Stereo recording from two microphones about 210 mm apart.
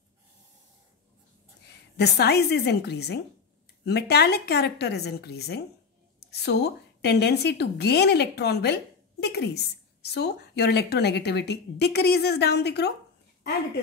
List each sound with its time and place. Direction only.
2.0 s a woman's voice: 50° left (ahead or behind)